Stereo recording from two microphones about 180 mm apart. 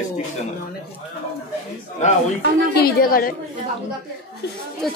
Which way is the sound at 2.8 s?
55° left (ahead or behind).